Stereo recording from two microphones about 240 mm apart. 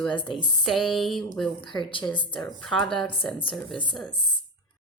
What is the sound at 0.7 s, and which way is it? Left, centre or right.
Speech, centre.